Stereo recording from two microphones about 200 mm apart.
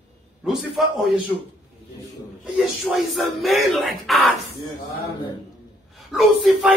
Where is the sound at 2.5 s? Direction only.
Centre (ahead or behind).